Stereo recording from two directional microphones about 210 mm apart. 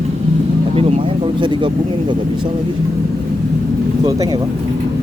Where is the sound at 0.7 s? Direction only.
30° right (ahead or behind).